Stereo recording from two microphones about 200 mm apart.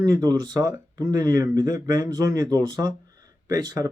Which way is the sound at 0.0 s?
20° right (ahead or behind).